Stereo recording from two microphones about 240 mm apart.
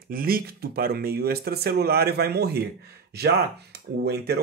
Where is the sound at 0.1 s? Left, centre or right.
Right.